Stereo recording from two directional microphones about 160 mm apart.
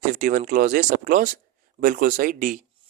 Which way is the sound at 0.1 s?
55° right (ahead or behind).